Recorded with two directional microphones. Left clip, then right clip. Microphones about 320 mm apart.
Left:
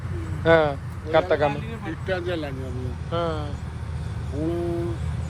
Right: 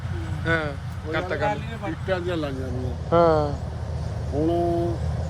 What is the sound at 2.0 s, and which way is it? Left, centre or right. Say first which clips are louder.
Speech: right 1 dB; right.